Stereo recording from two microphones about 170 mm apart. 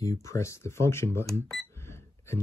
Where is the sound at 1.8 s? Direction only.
15° left (ahead or behind).